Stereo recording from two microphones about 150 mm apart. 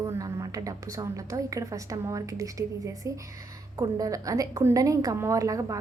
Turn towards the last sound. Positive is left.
turn(degrees=-20)  # may be behind; listen again after turning